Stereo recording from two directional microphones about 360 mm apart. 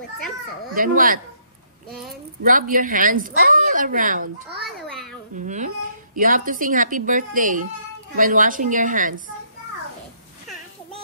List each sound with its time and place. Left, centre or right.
0.7 s a woman's voice: right
1.9 s a child's voice: centre
2.4 s a woman's voice: right
4.6 s babbling: centre
5.3 s a woman's voice: right